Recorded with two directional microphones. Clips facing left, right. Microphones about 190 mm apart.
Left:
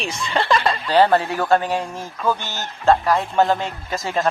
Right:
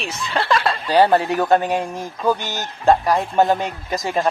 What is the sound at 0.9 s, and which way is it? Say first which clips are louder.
Speech: right 1 dB; 15° right (ahead or behind).